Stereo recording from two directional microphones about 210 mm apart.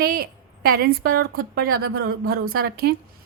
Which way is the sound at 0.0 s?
45° right (ahead or behind).